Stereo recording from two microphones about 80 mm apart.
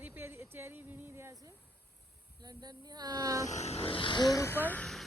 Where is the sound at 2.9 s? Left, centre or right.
Right.